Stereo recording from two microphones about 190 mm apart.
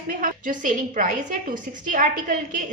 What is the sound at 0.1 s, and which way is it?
A woman's voice, 45° right (ahead or behind).